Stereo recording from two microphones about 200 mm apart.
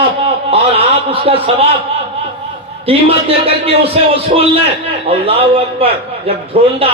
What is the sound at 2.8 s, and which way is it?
A man's voice, 30° right (ahead or behind).